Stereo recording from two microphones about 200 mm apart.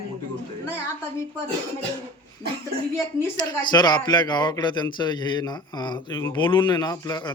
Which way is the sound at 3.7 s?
20° left (ahead or behind).